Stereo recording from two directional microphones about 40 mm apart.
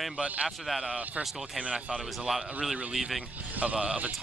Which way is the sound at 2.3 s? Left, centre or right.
Centre.